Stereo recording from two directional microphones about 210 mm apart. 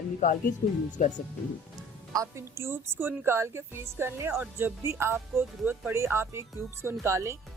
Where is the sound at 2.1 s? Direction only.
15° right (ahead or behind).